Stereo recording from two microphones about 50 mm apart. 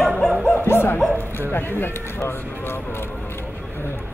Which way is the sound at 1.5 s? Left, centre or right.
Left.